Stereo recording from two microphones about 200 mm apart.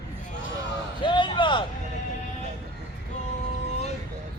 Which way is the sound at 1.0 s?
25° left (ahead or behind).